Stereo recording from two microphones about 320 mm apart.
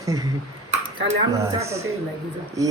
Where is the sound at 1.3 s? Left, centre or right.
Centre.